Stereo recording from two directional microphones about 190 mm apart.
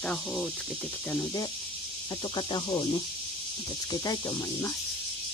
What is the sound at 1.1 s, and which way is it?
Speech, 15° left (ahead or behind).